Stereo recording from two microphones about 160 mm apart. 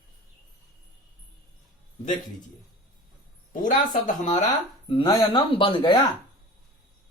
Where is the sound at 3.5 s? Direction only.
55° left (ahead or behind).